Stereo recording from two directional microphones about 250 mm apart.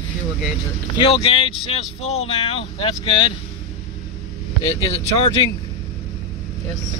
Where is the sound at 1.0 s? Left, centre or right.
Left.